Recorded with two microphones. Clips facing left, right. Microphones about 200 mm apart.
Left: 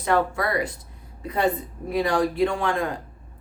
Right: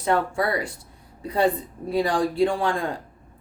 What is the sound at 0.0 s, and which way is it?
Speech, 30° right (ahead or behind).